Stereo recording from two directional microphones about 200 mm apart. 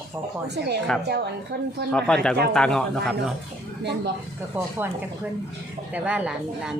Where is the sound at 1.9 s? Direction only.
5° left (ahead or behind).